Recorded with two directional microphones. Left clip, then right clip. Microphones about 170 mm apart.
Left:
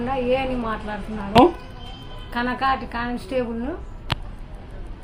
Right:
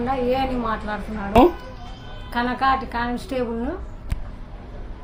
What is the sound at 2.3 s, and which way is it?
A woman's voice, 5° right (ahead or behind).